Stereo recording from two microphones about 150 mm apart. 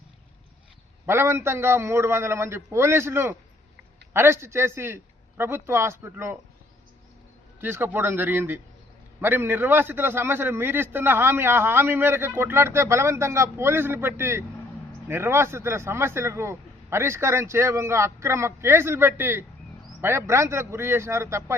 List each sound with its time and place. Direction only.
1.0 s a man's voice: 15° right (ahead or behind)
7.6 s a man's voice: 15° right (ahead or behind)